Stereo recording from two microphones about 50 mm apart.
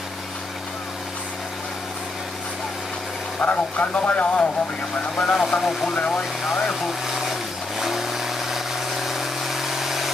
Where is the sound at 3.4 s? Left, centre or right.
Left; by 6.0 s centre.